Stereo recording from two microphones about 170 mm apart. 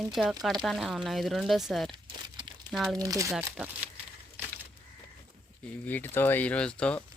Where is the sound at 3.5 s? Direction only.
10° right (ahead or behind).